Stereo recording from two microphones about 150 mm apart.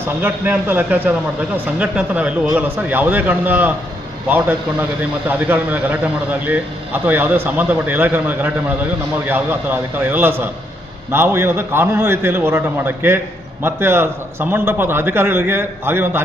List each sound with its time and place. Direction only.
0.2 s a man's voice: 10° right (ahead or behind)